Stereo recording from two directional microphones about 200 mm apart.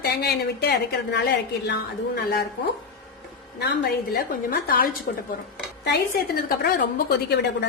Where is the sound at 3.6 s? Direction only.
55° left (ahead or behind).